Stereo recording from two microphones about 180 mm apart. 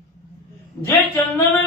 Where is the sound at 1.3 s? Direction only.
15° left (ahead or behind).